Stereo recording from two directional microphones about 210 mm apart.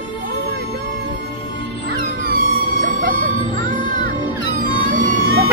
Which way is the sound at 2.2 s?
40° right (ahead or behind).